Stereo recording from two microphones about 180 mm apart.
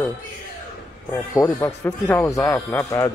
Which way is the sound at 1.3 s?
15° left (ahead or behind).